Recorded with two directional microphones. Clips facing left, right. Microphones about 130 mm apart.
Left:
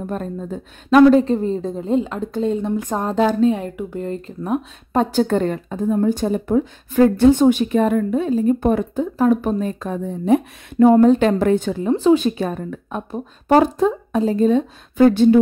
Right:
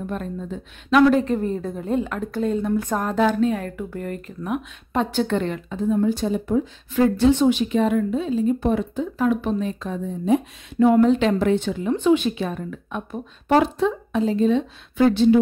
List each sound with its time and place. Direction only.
0.0 s a woman's voice: 40° left (ahead or behind); by 10.9 s 60° left (ahead or behind)
10.9 s a woman's voice: 40° left (ahead or behind)